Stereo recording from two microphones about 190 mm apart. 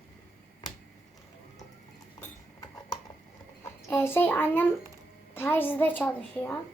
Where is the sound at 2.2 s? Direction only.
15° left (ahead or behind).